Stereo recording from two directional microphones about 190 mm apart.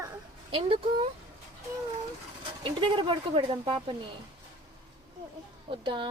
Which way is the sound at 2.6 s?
25° right (ahead or behind).